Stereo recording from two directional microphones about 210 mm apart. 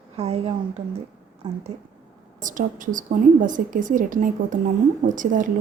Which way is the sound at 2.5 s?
40° right (ahead or behind).